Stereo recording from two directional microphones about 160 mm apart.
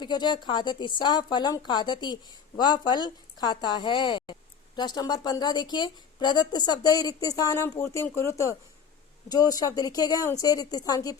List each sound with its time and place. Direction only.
0.0 s a woman's voice: 30° left (ahead or behind)